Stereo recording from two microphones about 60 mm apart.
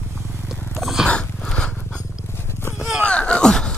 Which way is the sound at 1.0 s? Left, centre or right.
Centre.